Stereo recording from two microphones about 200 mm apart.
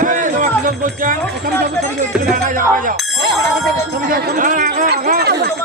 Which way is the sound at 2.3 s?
40° right (ahead or behind).